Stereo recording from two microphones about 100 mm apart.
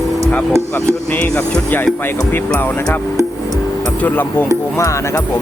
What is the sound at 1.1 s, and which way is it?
Speech, 15° left (ahead or behind).